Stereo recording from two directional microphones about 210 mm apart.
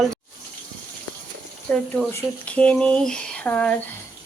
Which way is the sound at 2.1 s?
5° left (ahead or behind).